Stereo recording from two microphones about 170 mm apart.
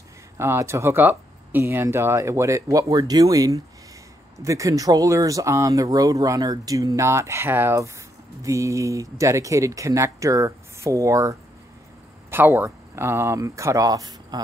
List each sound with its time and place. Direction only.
0.4 s speech: 15° right (ahead or behind)